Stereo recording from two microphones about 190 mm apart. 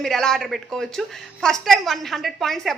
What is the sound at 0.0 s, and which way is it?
A woman's voice, 5° left (ahead or behind).